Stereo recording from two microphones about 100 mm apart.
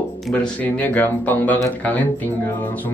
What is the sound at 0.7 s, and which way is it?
Speech, 15° left (ahead or behind).